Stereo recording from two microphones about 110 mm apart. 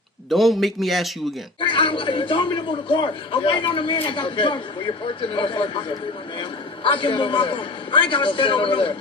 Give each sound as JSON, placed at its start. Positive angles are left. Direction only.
{"t": 0.3, "sound": "a man's voice", "side_deg": 0}
{"t": 1.6, "sound": "a man's voice", "side_deg": 50}